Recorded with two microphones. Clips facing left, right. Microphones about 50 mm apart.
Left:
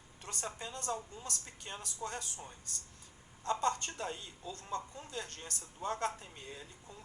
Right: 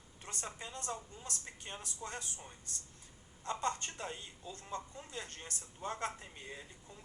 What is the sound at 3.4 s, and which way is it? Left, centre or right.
A woman's voice, right.